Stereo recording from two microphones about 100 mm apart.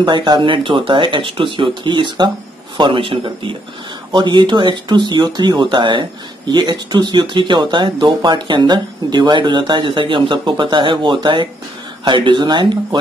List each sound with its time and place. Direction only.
0.0 s speech: 50° right (ahead or behind)
2.8 s a man's voice: 60° right (ahead or behind)